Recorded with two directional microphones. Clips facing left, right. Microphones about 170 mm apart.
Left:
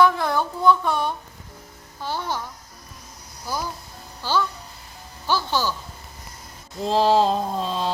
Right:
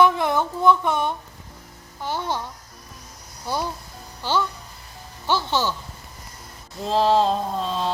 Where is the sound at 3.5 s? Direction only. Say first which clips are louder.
Right 2 dB; 25° right (ahead or behind).